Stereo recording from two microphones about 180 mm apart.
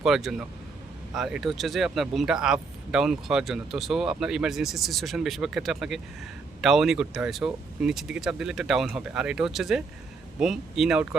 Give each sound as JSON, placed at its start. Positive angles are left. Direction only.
{"t": 0.0, "sound": "speech", "side_deg": 0}